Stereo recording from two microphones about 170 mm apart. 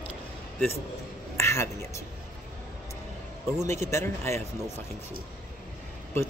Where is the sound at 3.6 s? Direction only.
15° left (ahead or behind).